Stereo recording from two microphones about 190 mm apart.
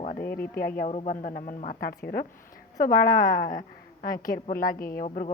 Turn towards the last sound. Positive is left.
turn(degrees=35)  # may be behind; listen again after turning